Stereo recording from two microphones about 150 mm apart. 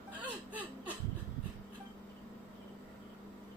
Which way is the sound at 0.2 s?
10° right (ahead or behind).